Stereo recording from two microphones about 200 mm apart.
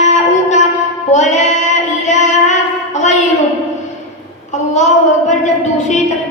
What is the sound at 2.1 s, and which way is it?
Female singing, 35° left (ahead or behind).